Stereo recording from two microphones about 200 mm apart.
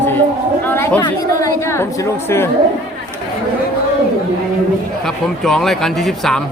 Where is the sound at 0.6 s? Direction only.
10° left (ahead or behind).